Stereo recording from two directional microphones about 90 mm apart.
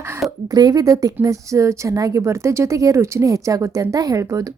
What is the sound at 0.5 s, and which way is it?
A woman's voice, 45° right (ahead or behind).